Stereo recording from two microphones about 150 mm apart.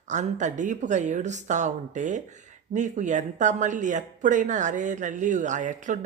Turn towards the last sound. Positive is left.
turn(degrees=-55)  # may be behind; listen again after turning